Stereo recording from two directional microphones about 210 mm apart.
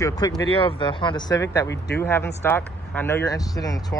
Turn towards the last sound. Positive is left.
turn(degrees=15)  # may be behind; listen again after turning